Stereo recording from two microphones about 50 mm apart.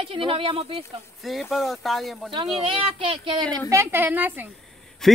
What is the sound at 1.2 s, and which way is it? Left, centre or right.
Speech, centre.